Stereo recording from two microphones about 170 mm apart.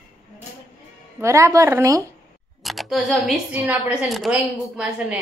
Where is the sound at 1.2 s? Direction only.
15° right (ahead or behind).